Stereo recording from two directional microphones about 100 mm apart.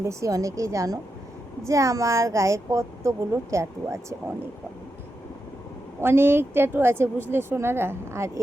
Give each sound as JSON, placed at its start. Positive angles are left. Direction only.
{"t": 0.0, "sound": "speech", "side_deg": -30}
{"t": 6.0, "sound": "a woman's voice", "side_deg": -25}